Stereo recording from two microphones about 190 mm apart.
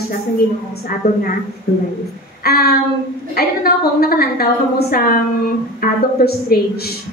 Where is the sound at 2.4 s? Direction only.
55° left (ahead or behind).